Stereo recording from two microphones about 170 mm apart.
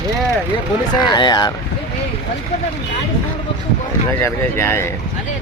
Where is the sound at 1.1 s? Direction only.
25° left (ahead or behind).